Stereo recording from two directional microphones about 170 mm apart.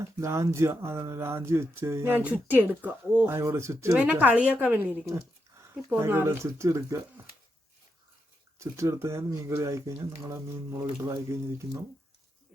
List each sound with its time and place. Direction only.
0.0 s speech: 15° right (ahead or behind)
8.5 s speech: 15° right (ahead or behind)